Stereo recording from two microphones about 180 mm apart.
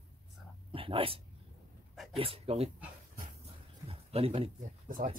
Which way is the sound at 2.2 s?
35° right (ahead or behind).